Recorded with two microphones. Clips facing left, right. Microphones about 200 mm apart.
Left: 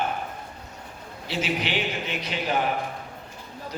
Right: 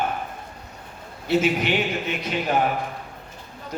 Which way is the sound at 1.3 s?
50° right (ahead or behind).